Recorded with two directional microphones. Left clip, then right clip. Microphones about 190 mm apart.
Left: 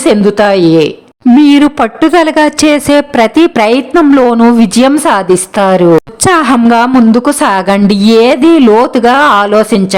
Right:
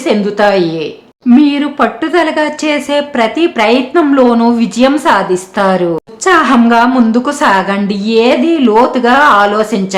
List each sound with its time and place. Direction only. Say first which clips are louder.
0.0 s a woman's voice: left 3 dB; 35° left (ahead or behind)
1.4 s a woman's voice: left 5 dB; 50° left (ahead or behind)